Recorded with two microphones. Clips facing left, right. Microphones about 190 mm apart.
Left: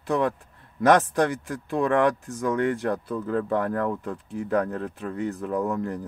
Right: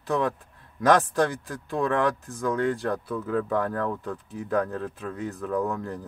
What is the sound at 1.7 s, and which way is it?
Speech, centre (ahead or behind).